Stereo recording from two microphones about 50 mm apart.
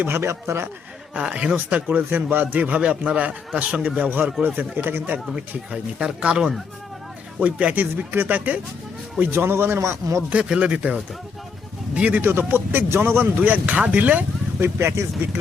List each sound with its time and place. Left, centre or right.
0.2 s speech: right
1.1 s a man's voice: right
1.5 s speech: right
2.0 s a man's voice: right
5.7 s speech: centre
7.3 s speech: right
9.3 s a man's voice: right
10.5 s a man's voice: right
12.2 s speech: right
13.4 s speech: right
14.6 s speech: right